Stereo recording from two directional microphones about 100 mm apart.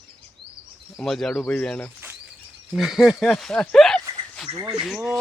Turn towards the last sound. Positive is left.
turn(degrees=-5)  # may be behind; listen again after turning